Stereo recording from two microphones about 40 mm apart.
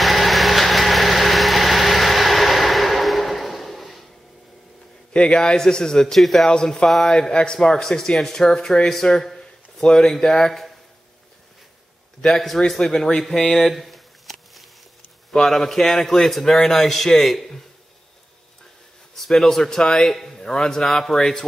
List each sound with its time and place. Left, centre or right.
0.0 s vehicle: centre
5.1 s a man's voice: centre
6.1 s a man's voice: centre
6.5 s a man's voice: centre
9.1 s a sound: centre
9.8 s a man's voice: centre
12.5 s a man's voice: centre
13.7 s a sound: centre
15.3 s a man's voice: centre
19.1 s a man's voice: centre